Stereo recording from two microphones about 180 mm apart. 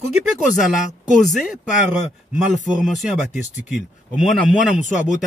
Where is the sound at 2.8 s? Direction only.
5° right (ahead or behind).